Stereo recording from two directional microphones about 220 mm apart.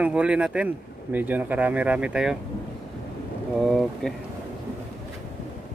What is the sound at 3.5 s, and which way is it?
Speech, centre (ahead or behind).